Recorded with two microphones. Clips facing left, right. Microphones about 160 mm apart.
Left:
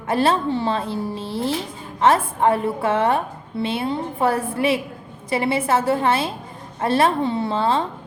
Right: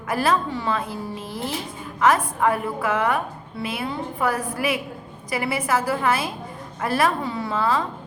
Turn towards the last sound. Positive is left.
turn(degrees=30)  # may be behind; listen again after turning